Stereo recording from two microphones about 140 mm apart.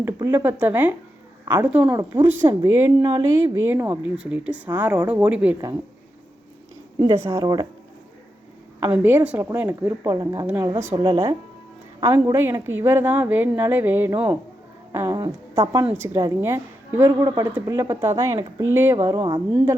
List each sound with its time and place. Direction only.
0.0 s a woman's voice: 15° right (ahead or behind)
1.9 s speech: 30° right (ahead or behind)
2.2 s a woman's voice: 15° right (ahead or behind)
3.0 s a woman's voice: 35° right (ahead or behind)
3.4 s a woman's voice: 20° right (ahead or behind)
7.0 s speech: 20° right (ahead or behind)
8.8 s a woman's voice: 15° right (ahead or behind)
10.0 s a woman's voice: 25° right (ahead or behind)
10.9 s a woman's voice: 35° right (ahead or behind)
12.0 s a woman's voice: 20° right (ahead or behind)
15.1 s speech: 30° right (ahead or behind)
16.0 s speech: 20° right (ahead or behind)